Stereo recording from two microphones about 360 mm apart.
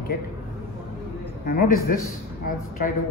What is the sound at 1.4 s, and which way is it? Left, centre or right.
Speech, left.